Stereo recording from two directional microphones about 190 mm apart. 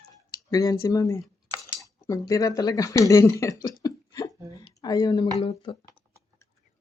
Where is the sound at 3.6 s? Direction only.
20° left (ahead or behind).